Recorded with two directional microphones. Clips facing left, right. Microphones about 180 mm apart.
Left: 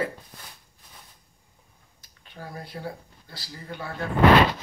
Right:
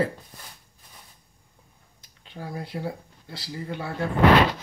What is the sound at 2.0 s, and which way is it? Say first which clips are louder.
Speech: right 3 dB; 20° right (ahead or behind).